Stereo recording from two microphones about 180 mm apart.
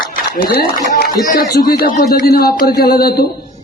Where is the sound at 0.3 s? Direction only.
55° left (ahead or behind).